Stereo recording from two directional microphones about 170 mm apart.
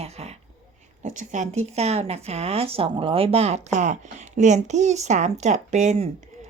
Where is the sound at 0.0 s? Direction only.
40° right (ahead or behind).